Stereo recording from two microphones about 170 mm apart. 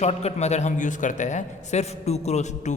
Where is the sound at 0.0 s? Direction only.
40° left (ahead or behind).